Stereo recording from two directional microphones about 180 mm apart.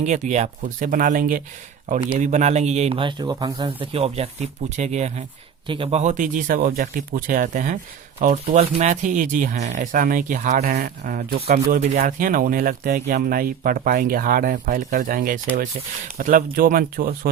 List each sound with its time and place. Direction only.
0.0 s speech: 40° right (ahead or behind)
2.0 s speech: 40° right (ahead or behind)